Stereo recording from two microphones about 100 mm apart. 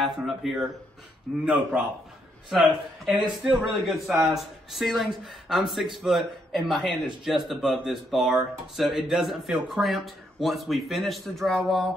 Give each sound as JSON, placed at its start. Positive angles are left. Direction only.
{"t": 0.0, "sound": "a man's voice", "side_deg": 0}
{"t": 1.4, "sound": "speech", "side_deg": -15}
{"t": 2.5, "sound": "a man's voice", "side_deg": 0}